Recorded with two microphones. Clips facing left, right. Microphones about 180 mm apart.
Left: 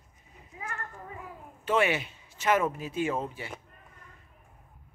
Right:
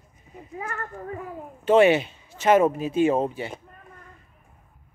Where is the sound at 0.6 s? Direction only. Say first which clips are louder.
Right 7 dB; 55° right (ahead or behind).